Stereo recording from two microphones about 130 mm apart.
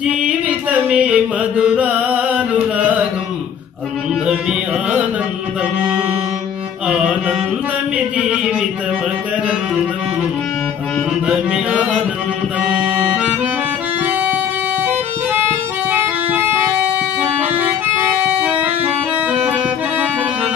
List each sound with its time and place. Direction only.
0.0 s mantra: 10° right (ahead or behind)
4.3 s music: 5° right (ahead or behind)
6.9 s mantra: 10° right (ahead or behind)
8.2 s music: 5° right (ahead or behind)
11.2 s music: 10° right (ahead or behind)
12.6 s accordion: 10° right (ahead or behind)
15.9 s music: 15° right (ahead or behind)
17.2 s accordion: 10° right (ahead or behind)
18.4 s music: 10° right (ahead or behind)